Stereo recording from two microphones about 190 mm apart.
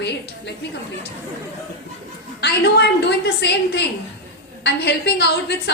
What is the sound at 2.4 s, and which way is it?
A woman's voice, 60° left (ahead or behind).